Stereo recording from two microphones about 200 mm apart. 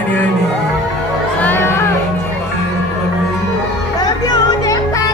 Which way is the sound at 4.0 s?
20° left (ahead or behind).